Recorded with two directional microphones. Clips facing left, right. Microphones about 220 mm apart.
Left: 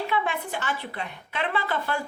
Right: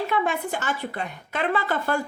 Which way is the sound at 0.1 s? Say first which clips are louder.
Right 3 dB; 45° right (ahead or behind).